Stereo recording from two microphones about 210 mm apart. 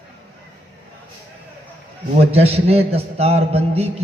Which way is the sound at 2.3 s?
30° right (ahead or behind).